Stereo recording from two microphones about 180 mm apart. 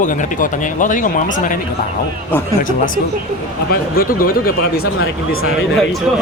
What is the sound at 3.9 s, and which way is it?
Speech, 55° left (ahead or behind).